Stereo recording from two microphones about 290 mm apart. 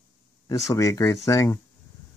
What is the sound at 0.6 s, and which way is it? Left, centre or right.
Speech, centre.